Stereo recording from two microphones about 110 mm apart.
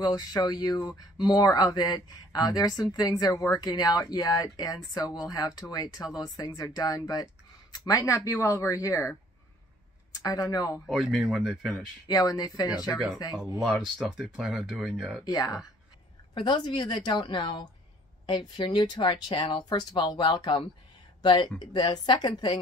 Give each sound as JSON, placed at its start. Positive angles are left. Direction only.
{"t": 0.0, "sound": "speech", "side_deg": 35}
{"t": 10.1, "sound": "speech", "side_deg": 35}
{"t": 10.9, "sound": "speech", "side_deg": 0}
{"t": 12.1, "sound": "speech", "side_deg": 35}
{"t": 13.7, "sound": "speech", "side_deg": -5}
{"t": 15.2, "sound": "speech", "side_deg": 35}
{"t": 16.3, "sound": "speech", "side_deg": 45}